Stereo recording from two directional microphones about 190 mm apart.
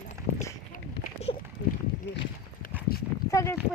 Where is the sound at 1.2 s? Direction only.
35° left (ahead or behind).